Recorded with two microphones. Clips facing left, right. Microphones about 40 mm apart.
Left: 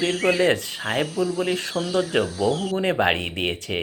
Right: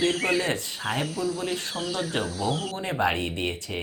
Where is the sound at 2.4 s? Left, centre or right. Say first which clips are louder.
Left 6 dB; left.